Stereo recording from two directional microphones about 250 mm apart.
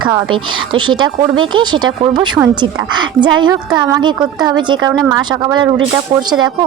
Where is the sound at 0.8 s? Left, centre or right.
Centre.